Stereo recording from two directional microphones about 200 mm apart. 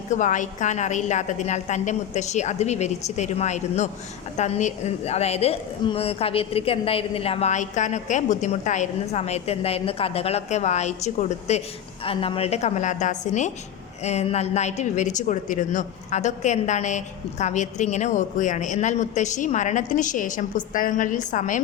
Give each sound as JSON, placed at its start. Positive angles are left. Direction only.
{"t": 0.1, "sound": "a woman's voice", "side_deg": 40}